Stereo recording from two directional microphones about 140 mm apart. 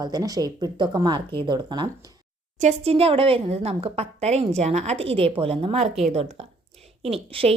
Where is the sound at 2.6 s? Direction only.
50° right (ahead or behind).